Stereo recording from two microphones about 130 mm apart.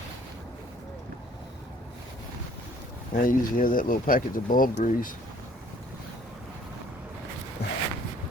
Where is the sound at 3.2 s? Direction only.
90° left.